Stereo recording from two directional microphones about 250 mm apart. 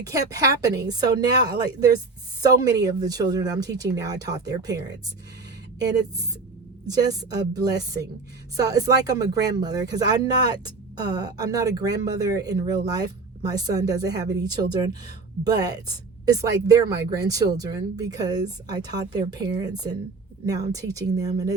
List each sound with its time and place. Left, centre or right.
0.0 s speech: centre